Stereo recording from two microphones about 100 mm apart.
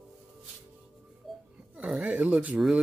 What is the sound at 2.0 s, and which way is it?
Speech, 15° right (ahead or behind).